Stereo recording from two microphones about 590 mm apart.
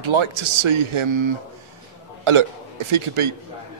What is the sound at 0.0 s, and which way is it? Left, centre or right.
Speech, right.